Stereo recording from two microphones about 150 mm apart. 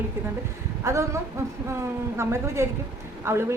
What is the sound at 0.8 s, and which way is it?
Speech, 20° right (ahead or behind).